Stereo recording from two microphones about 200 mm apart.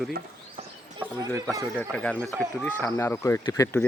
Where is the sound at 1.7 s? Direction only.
5° left (ahead or behind).